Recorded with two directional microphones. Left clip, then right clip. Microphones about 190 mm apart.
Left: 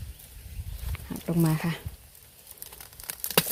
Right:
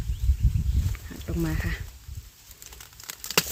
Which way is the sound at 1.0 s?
25° left (ahead or behind).